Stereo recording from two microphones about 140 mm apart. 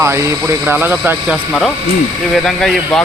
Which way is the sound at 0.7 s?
15° right (ahead or behind).